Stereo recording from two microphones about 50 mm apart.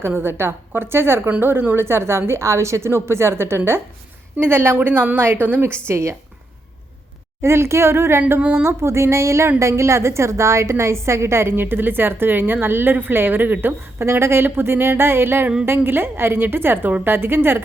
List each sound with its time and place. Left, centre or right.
0.0 s a woman's voice: right
4.9 s a woman's voice: right
5.8 s a sound: right
7.4 s a woman's voice: right
8.4 s speech: right
8.6 s a sound: right
9.6 s a woman's voice: right
14.0 s a woman's voice: right